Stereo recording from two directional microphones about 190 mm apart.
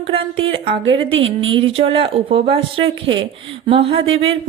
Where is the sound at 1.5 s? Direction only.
30° right (ahead or behind).